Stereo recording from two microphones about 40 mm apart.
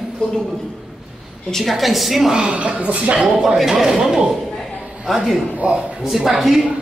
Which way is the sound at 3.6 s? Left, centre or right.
Centre.